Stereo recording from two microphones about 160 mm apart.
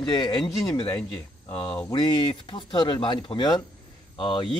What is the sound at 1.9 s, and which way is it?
Speech, 30° left (ahead or behind).